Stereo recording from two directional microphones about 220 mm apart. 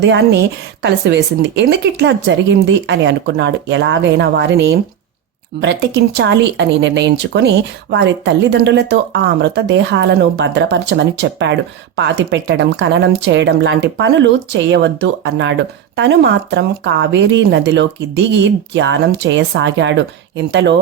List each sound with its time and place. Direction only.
0.0 s speech: 50° right (ahead or behind)